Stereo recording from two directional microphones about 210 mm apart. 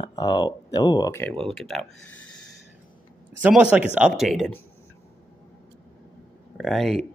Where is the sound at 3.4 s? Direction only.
5° right (ahead or behind).